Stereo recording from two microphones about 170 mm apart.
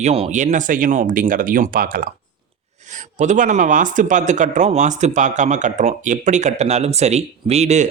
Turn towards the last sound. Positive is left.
turn(degrees=-40)  # may be behind; listen again after turning